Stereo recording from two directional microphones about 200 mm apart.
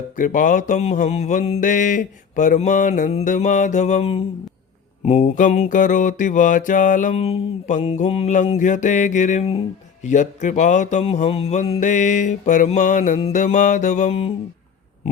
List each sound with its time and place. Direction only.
0.2 s music: 40° left (ahead or behind)